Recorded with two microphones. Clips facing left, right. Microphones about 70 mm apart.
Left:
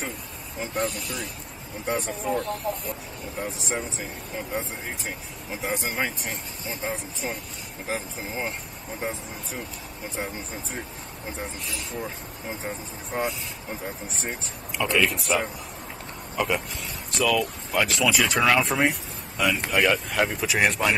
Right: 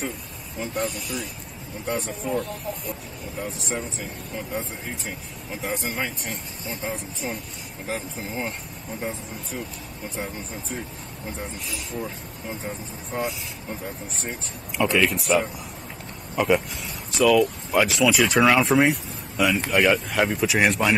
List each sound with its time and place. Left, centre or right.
0.6 s speech: centre
10.1 s speech: centre
14.9 s speech: centre